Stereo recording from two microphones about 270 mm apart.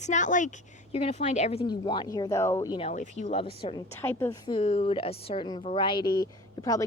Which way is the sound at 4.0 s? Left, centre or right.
Centre.